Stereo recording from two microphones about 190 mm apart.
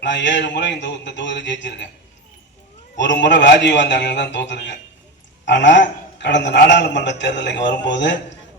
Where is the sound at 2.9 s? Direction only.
70° left (ahead or behind).